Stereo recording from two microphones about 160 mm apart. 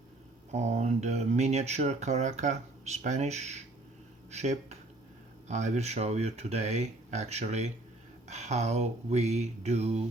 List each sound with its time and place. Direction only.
0.5 s speech: 45° right (ahead or behind)